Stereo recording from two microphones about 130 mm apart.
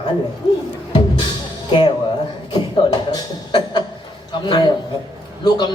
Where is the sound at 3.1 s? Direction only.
35° left (ahead or behind).